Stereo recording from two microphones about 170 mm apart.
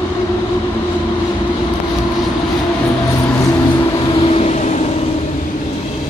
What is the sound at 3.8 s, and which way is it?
Vehicle, 30° left (ahead or behind).